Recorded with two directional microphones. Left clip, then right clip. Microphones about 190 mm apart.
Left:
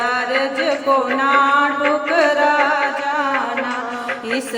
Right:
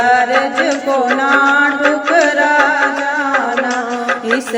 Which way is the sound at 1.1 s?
15° right (ahead or behind).